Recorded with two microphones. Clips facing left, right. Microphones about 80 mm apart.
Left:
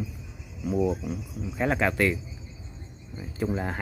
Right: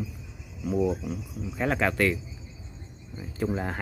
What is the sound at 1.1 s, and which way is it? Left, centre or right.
Speech, centre.